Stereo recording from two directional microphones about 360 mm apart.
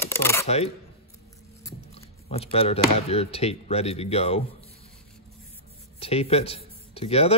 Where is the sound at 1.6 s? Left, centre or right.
Centre.